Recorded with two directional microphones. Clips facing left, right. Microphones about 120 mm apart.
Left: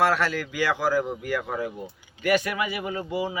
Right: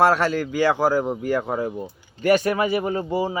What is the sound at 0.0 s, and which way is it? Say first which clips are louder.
Speech: right 5 dB; 35° right (ahead or behind).